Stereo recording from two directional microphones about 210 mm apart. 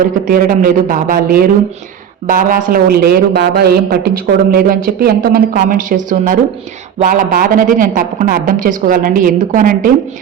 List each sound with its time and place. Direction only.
0.0 s a woman's voice: 40° right (ahead or behind)